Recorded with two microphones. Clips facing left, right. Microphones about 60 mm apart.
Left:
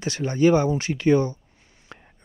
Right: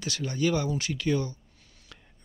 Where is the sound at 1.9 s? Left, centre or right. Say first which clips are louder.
Left 8 dB; left.